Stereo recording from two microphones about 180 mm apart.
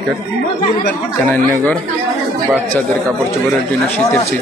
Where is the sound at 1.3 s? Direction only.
10° left (ahead or behind).